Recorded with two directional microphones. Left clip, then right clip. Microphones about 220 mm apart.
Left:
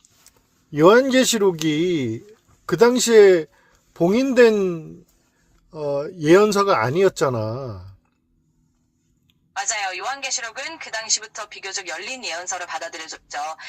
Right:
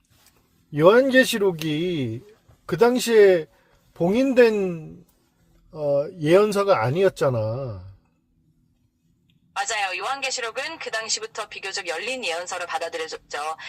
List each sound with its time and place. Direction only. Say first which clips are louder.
0.7 s speech: left 2 dB; 5° left (ahead or behind)
9.5 s a woman's voice: even; 30° right (ahead or behind)